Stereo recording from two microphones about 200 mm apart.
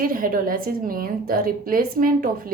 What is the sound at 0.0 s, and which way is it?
A woman's voice, 45° right (ahead or behind).